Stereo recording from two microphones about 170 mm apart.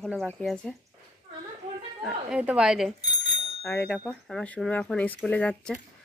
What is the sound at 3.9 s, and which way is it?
Speech, 5° left (ahead or behind).